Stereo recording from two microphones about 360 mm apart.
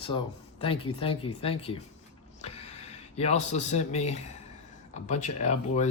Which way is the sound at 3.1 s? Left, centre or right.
Centre.